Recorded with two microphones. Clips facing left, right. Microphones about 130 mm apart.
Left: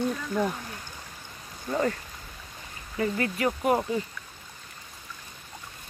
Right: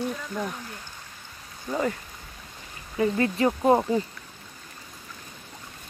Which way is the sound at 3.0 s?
25° right (ahead or behind).